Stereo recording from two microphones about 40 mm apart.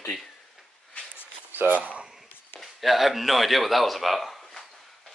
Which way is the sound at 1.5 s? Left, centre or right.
Right.